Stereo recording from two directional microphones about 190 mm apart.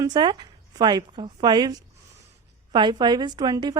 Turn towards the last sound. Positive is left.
turn(degrees=-20)  # may be behind; listen again after turning